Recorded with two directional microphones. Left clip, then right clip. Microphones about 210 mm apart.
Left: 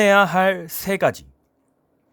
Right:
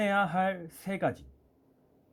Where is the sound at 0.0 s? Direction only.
50° left (ahead or behind).